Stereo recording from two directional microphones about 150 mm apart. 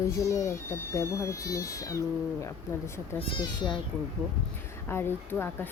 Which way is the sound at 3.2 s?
35° left (ahead or behind).